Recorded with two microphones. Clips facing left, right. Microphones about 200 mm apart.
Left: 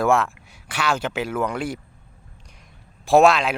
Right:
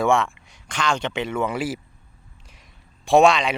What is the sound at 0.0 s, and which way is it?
A man's voice, centre (ahead or behind).